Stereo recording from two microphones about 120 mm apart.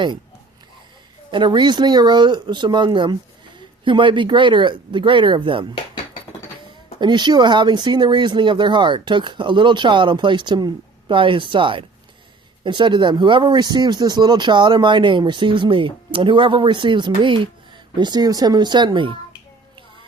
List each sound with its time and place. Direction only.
1.3 s speech: 40° right (ahead or behind)
7.0 s speech: 40° right (ahead or behind)